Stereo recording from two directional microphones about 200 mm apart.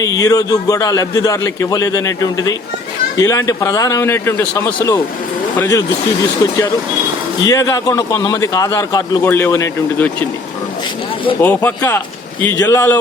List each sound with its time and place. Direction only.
0.0 s a man's voice: 15° left (ahead or behind)
7.4 s a man's voice: 15° left (ahead or behind)
11.3 s a man's voice: 10° left (ahead or behind)